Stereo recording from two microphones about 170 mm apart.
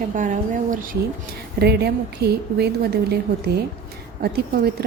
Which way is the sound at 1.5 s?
75° right (ahead or behind).